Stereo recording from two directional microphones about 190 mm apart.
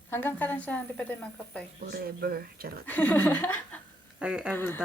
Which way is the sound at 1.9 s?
55° right (ahead or behind).